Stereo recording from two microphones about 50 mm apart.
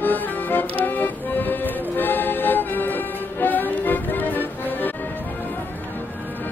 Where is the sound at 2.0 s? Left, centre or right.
Left.